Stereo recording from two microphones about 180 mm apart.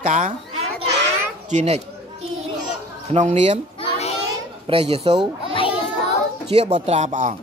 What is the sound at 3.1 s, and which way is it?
Speech, 40° right (ahead or behind).